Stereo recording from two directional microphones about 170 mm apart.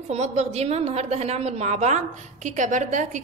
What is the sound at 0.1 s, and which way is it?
A woman's voice, 40° right (ahead or behind).